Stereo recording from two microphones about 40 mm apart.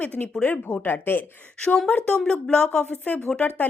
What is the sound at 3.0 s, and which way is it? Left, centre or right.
Speech, left.